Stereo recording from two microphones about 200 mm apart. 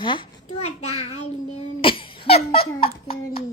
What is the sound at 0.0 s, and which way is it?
A child's voice, 25° left (ahead or behind).